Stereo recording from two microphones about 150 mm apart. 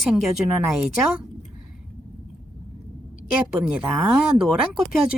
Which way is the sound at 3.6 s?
10° right (ahead or behind).